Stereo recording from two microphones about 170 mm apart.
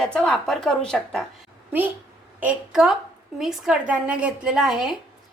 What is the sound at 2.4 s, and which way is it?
A woman's voice, 5° right (ahead or behind).